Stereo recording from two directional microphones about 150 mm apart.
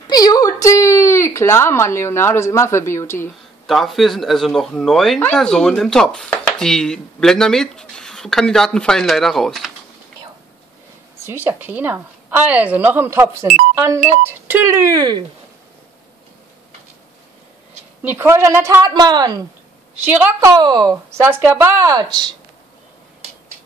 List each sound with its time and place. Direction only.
0.1 s speech: 25° left (ahead or behind)
3.6 s speech: centre (ahead or behind)
11.2 s a woman's voice: 15° right (ahead or behind)
18.0 s a woman's voice: 15° right (ahead or behind)
20.1 s a woman's voice: 15° right (ahead or behind)